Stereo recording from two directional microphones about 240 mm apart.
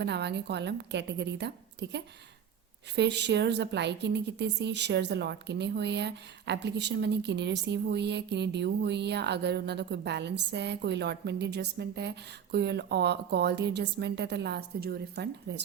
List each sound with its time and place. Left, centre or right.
0.0 s a woman's voice: right